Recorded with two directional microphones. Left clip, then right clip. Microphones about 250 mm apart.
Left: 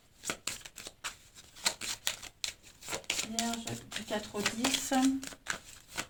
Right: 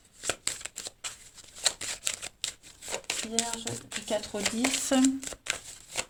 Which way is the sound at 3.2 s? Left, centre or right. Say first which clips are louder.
Right 4 dB; right.